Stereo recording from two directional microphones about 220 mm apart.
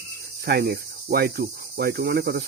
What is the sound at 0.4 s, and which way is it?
Speech, 45° right (ahead or behind).